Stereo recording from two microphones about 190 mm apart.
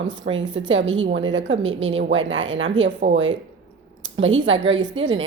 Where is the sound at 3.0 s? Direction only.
65° right (ahead or behind).